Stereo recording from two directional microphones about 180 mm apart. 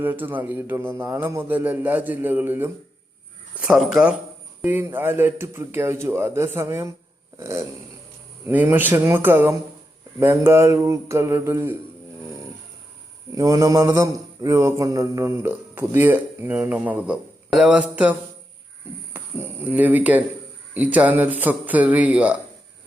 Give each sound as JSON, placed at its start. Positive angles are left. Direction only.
{"t": 0.0, "sound": "a man's voice", "side_deg": -10}
{"t": 7.3, "sound": "a sound", "side_deg": -15}
{"t": 8.4, "sound": "a man's voice", "side_deg": -10}
{"t": 13.3, "sound": "a man's voice", "side_deg": -20}